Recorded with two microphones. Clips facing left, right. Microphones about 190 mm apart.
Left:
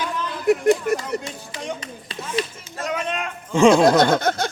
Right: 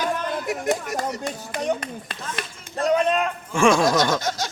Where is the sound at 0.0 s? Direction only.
50° right (ahead or behind).